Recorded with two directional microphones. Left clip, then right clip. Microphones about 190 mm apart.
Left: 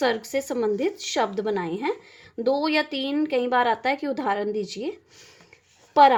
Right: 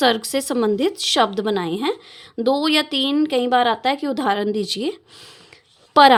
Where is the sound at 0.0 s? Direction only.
30° right (ahead or behind).